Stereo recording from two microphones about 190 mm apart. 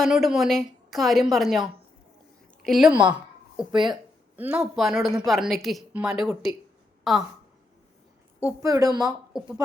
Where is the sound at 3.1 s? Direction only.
5° right (ahead or behind).